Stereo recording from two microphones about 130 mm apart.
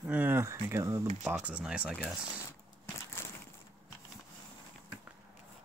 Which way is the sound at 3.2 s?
15° left (ahead or behind).